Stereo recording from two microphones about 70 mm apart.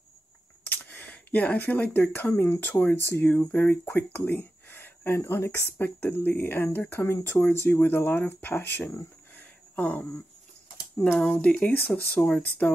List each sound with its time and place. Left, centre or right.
0.7 s speech: left
9.3 s a sound: left
11.4 s speech: centre